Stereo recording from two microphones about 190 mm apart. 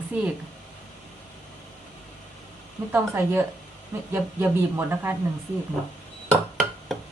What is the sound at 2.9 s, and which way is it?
Speech, 10° right (ahead or behind).